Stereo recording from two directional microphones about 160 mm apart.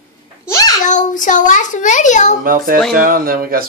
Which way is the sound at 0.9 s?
50° left (ahead or behind).